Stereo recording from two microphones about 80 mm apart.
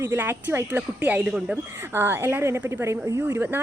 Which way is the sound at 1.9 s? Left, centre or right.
Right.